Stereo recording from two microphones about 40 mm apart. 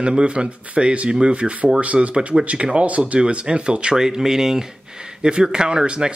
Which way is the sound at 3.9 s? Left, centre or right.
Centre.